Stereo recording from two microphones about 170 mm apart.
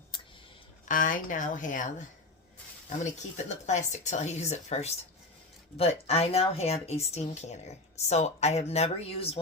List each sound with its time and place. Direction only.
0.9 s speech: 50° left (ahead or behind); by 9.4 s 35° left (ahead or behind)